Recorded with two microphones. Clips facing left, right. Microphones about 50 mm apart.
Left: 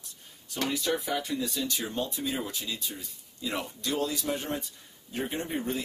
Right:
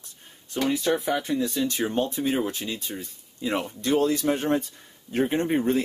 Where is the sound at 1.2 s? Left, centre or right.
Right.